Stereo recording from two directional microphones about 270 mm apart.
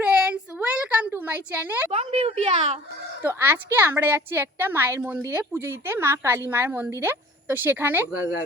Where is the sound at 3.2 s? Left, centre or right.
Centre.